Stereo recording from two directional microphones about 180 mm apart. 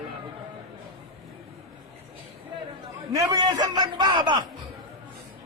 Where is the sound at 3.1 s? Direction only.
20° right (ahead or behind).